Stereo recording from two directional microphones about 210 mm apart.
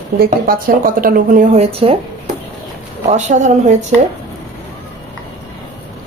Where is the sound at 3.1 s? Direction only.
35° right (ahead or behind).